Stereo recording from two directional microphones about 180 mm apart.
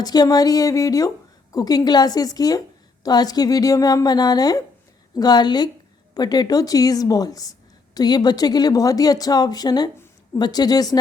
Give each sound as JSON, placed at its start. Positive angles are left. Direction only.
{"t": 0.0, "sound": "speech", "side_deg": 20}